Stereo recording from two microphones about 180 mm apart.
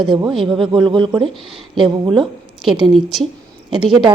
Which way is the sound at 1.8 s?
25° right (ahead or behind).